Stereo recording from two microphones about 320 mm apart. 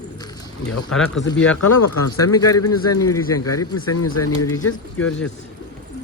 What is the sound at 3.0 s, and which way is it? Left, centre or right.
Speech, centre.